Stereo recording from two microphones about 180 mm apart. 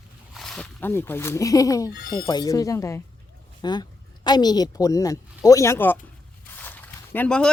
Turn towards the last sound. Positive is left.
turn(degrees=10)  # may be behind; listen again after turning